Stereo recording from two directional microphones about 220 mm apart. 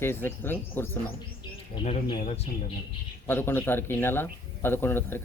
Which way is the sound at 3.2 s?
10° left (ahead or behind).